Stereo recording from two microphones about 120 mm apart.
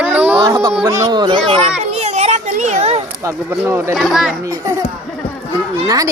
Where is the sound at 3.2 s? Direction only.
25° right (ahead or behind).